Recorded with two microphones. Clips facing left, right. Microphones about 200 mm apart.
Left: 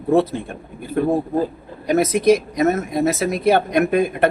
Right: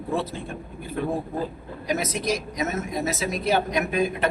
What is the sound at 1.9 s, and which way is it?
Speech, 60° left (ahead or behind).